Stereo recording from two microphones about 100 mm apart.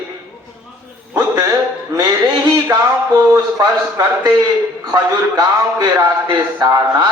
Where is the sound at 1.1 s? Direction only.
40° right (ahead or behind).